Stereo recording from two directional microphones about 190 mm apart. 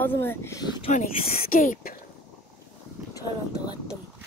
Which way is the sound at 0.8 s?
40° left (ahead or behind).